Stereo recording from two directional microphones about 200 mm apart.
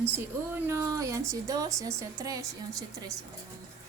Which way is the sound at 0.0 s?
10° right (ahead or behind).